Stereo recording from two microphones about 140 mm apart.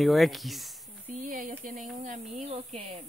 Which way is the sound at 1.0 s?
75° right (ahead or behind).